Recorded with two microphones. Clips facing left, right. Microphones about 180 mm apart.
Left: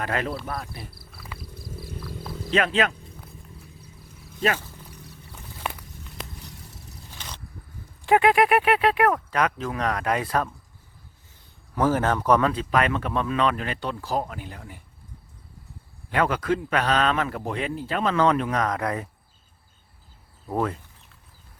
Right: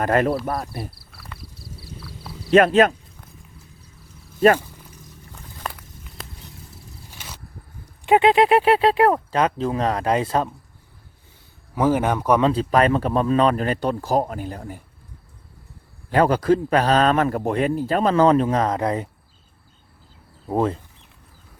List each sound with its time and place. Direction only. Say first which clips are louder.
0.0 s speech: right 9 dB; 50° right (ahead or behind)
0.4 s insect: right 7 dB; 50° right (ahead or behind)
1.1 s a sound: even; centre (ahead or behind)
1.4 s a sound: left 3 dB; 50° left (ahead or behind)
2.5 s speech: right 9 dB; 45° right (ahead or behind)
4.4 s speech: right 10 dB; 45° right (ahead or behind)
7.1 s vehicle: even; 10° right (ahead or behind)
8.0 s speech: right 3 dB; 20° right (ahead or behind)
11.7 s speech: right 3 dB; 10° right (ahead or behind)
12.4 s a man's voice: right 5 dB; 30° right (ahead or behind)
16.1 s a man's voice: right 6 dB; 35° right (ahead or behind)
20.5 s speech: right 5 dB; 30° right (ahead or behind)